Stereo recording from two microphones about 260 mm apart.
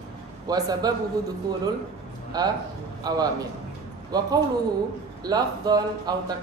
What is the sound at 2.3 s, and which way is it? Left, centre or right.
A woman's voice, centre.